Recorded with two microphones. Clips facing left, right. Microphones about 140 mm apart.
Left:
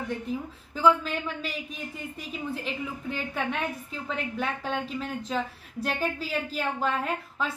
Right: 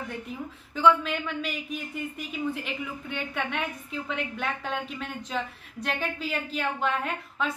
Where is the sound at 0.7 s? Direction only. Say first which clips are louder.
Right 1 dB; 5° left (ahead or behind).